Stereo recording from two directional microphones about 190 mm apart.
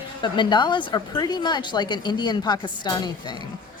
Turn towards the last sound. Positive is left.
turn(degrees=20)  # may be behind; listen again after turning